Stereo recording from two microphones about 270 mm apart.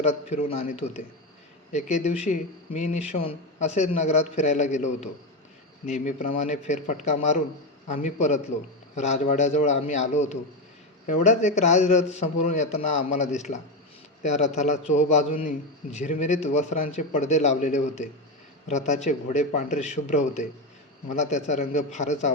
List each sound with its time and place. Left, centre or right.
0.0 s a man's voice: left